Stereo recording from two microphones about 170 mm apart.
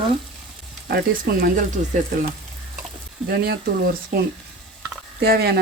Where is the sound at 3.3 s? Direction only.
65° right (ahead or behind).